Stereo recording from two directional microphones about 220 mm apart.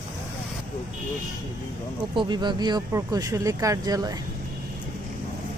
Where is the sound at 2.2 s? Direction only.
20° right (ahead or behind).